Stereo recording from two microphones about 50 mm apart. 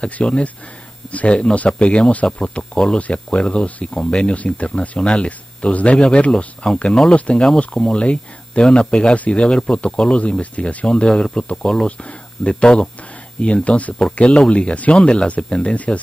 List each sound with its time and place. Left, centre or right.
0.0 s speech: left